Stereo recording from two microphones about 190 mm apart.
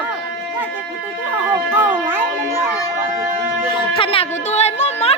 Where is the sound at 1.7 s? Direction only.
10° right (ahead or behind).